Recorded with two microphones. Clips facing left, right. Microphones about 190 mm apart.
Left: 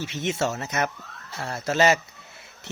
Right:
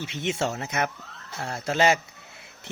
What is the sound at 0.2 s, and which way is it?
Speech, 15° right (ahead or behind).